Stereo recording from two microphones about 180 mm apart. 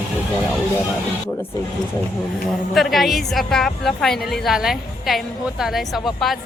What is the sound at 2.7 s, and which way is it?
A woman's voice, centre (ahead or behind).